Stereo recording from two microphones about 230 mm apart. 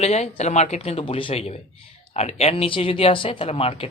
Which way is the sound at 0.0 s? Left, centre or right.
Left.